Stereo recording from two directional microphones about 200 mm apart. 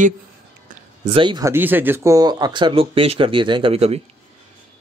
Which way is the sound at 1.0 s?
25° right (ahead or behind).